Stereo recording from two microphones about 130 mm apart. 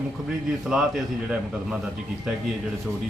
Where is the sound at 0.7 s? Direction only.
5° right (ahead or behind).